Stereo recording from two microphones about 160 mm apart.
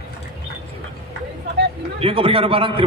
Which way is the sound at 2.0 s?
35° right (ahead or behind).